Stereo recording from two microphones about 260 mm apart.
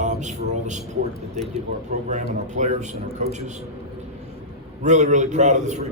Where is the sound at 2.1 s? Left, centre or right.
Right.